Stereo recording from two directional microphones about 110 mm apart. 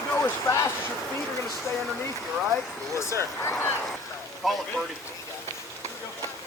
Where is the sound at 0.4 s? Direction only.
25° left (ahead or behind).